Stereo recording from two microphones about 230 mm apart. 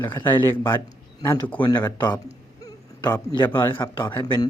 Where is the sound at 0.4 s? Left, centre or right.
Centre.